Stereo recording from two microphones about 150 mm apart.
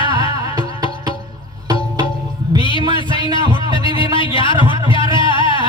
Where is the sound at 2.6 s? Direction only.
35° left (ahead or behind).